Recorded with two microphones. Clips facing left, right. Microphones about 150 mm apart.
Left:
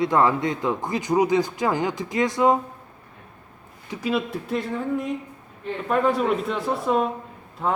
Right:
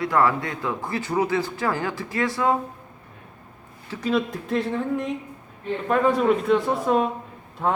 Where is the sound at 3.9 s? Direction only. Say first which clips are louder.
Right 1 dB; 5° left (ahead or behind).